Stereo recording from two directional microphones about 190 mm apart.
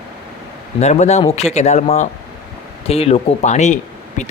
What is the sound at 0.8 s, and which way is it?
Speech, 35° left (ahead or behind).